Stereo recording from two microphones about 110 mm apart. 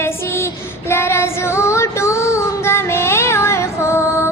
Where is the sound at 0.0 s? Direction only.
25° left (ahead or behind).